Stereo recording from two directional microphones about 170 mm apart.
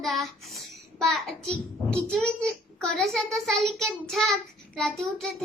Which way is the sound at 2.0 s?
5° left (ahead or behind).